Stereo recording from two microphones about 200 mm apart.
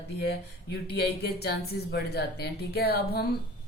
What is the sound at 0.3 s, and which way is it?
Speech, 55° left (ahead or behind).